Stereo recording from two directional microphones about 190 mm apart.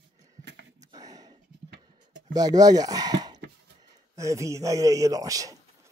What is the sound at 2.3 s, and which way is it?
Speech, 20° right (ahead or behind).